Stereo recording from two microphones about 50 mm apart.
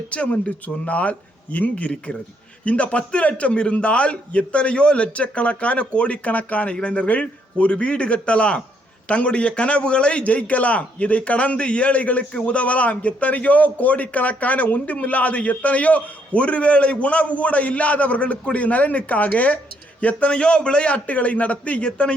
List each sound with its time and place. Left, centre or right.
0.1 s a man's voice: left